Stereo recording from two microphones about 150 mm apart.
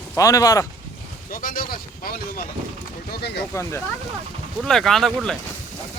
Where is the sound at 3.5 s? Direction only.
20° left (ahead or behind).